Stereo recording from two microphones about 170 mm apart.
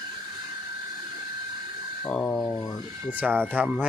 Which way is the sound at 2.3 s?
15° left (ahead or behind).